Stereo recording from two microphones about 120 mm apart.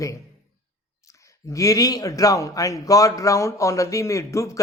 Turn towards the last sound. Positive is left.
turn(degrees=25)  # may be behind; listen again after turning